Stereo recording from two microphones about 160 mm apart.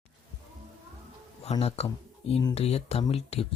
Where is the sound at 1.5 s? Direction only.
40° left (ahead or behind).